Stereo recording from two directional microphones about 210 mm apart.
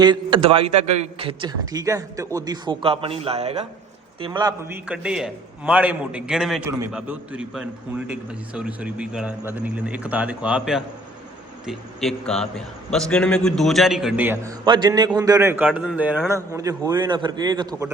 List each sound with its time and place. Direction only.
0.0 s a man's voice: 20° right (ahead or behind)
4.2 s a man's voice: 20° right (ahead or behind)
4.9 s a man's voice: 5° right (ahead or behind)